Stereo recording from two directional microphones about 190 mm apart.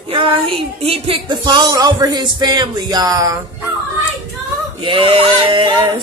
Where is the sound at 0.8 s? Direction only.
30° right (ahead or behind).